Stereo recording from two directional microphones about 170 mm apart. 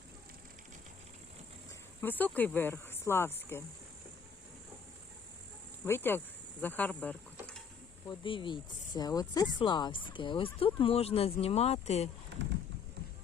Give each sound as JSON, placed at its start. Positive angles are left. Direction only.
{"t": 2.0, "sound": "speech", "side_deg": 10}
{"t": 5.8, "sound": "speech", "side_deg": 15}
{"t": 8.0, "sound": "speech", "side_deg": 30}
{"t": 12.4, "sound": "clip-clop", "side_deg": -90}